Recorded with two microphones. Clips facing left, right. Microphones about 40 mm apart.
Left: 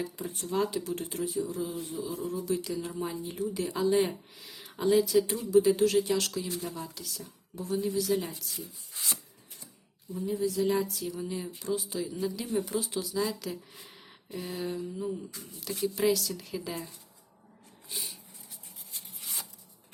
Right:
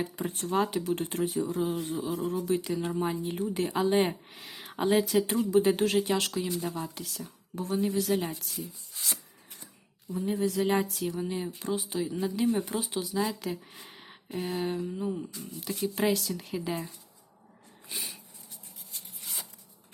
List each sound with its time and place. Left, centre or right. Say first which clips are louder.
0.0 s speech: right 3 dB; right
2.5 s speech: right 3 dB; right
10.1 s speech: right 2 dB; right
11.2 s speech: right 3 dB; right
13.7 s a sound: right 2 dB; centre
14.3 s speech: right 4 dB; right
15.8 s speech: left 1 dB; right
17.8 s a sound: right 1 dB; right